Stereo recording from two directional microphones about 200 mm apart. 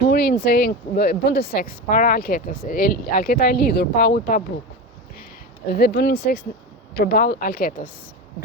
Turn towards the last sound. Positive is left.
turn(degrees=45)  # may be behind; listen again after turning